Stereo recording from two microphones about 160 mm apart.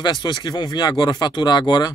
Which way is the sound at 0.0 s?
25° left (ahead or behind).